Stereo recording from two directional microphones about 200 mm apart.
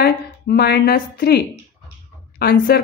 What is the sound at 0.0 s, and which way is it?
A woman's voice, 50° left (ahead or behind).